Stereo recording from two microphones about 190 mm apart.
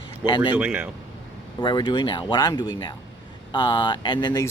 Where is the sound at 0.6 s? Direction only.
5° right (ahead or behind).